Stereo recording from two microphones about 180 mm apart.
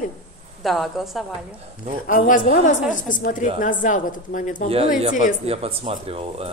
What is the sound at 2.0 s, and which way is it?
Speech, 50° left (ahead or behind).